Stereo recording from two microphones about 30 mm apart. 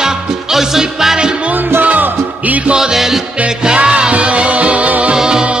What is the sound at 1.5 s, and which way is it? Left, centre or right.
Music, right.